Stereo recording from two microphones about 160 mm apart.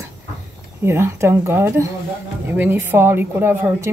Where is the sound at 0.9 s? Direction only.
15° right (ahead or behind).